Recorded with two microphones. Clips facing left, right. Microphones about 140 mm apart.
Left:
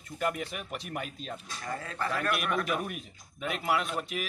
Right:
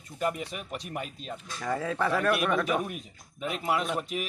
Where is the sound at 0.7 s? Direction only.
Centre (ahead or behind).